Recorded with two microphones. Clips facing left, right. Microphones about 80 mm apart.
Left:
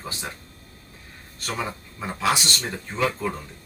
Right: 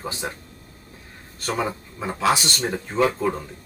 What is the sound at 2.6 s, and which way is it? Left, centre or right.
Speech, right.